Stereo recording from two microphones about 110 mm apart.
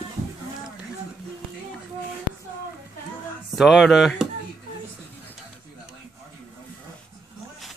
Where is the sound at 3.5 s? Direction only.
Centre (ahead or behind).